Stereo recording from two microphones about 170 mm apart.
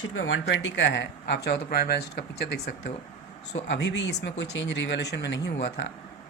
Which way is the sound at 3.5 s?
90° left.